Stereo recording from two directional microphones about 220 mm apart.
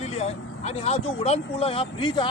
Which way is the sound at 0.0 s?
30° left (ahead or behind).